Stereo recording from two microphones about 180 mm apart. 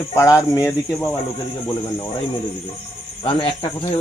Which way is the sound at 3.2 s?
30° left (ahead or behind).